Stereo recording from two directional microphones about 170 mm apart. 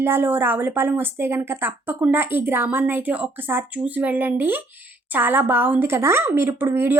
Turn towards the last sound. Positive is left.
turn(degrees=-15)  # may be behind; listen again after turning